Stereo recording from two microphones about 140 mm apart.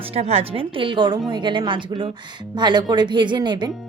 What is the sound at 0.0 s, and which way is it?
A woman's voice, 45° right (ahead or behind).